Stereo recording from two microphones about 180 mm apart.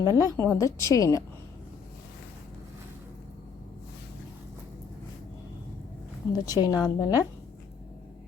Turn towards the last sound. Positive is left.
turn(degrees=20)  # may be behind; listen again after turning